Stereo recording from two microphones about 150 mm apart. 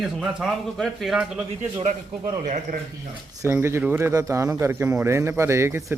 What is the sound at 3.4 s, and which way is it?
Speech, 15° right (ahead or behind).